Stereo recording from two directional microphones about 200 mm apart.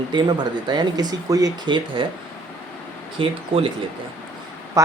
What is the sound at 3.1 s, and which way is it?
Speech, 25° right (ahead or behind).